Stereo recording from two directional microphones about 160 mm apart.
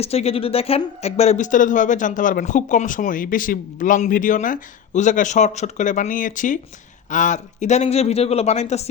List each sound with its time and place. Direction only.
0.0 s speech: 40° left (ahead or behind)